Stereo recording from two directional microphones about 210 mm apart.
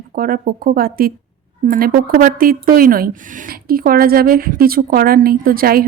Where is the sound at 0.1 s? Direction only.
40° right (ahead or behind).